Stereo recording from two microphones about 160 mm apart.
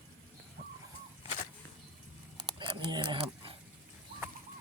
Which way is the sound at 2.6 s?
30° right (ahead or behind).